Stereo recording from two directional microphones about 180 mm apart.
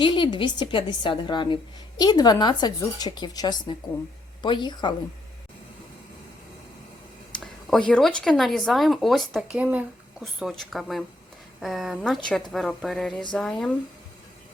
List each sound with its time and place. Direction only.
0.0 s a woman's voice: 30° left (ahead or behind)
7.3 s speech: 5° left (ahead or behind)